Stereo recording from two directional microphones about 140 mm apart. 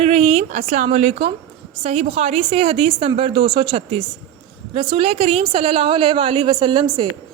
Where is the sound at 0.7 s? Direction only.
55° right (ahead or behind).